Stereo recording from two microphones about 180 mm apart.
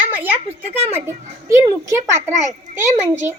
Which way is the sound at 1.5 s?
15° right (ahead or behind).